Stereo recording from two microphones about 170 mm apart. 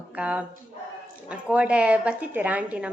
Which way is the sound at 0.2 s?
5° right (ahead or behind).